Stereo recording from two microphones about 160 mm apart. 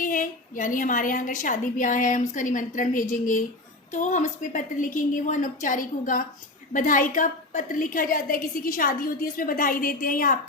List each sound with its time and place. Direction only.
0.0 s a woman's voice: 55° left (ahead or behind)